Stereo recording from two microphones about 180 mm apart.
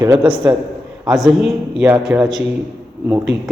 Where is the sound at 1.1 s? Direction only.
Centre (ahead or behind).